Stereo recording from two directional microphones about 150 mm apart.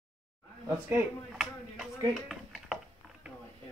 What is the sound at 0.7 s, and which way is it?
Speech, 15° right (ahead or behind).